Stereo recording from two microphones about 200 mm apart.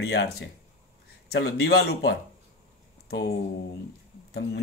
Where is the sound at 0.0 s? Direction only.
55° left (ahead or behind).